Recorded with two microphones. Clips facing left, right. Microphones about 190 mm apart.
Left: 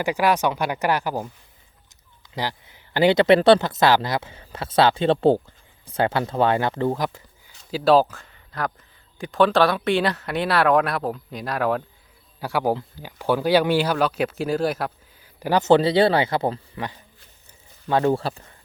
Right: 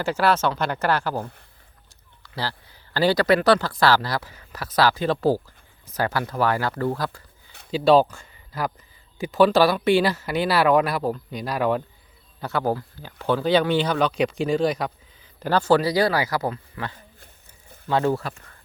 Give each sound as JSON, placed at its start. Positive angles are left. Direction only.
{"t": 0.0, "sound": "speech", "side_deg": 15}
{"t": 1.2, "sound": "speech", "side_deg": -60}
{"t": 2.2, "sound": "speech", "side_deg": 20}
{"t": 7.7, "sound": "speech", "side_deg": 0}
{"t": 12.4, "sound": "speech", "side_deg": 10}
{"t": 18.2, "sound": "speech", "side_deg": 30}